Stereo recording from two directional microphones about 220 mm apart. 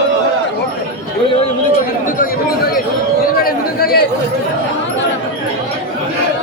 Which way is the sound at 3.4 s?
45° left (ahead or behind).